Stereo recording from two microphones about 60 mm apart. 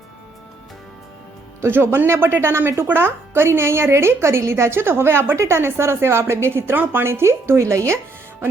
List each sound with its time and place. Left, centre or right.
1.6 s a woman's voice: right